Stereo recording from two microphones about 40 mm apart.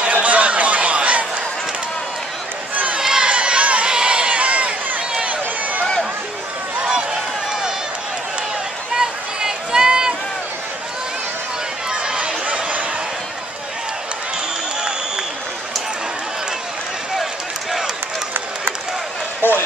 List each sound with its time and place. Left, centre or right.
0.1 s a sound: right
2.7 s run: right
3.0 s run: centre
3.3 s crowd: right
3.9 s run: right
6.8 s run: centre
8.9 s a sound: centre
11.9 s a sound: right
14.8 s run: centre
17.2 s run: centre